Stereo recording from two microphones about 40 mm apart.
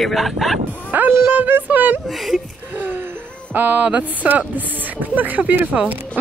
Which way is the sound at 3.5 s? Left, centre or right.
Right.